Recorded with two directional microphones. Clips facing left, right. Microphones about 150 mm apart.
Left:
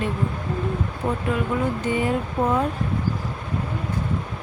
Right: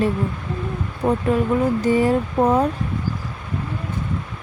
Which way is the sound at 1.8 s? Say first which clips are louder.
Right 6 dB; 35° right (ahead or behind).